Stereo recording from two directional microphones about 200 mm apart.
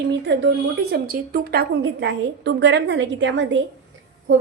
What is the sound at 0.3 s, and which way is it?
Speech, 60° right (ahead or behind).